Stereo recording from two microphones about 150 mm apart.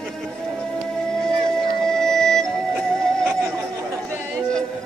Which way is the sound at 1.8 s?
5° left (ahead or behind).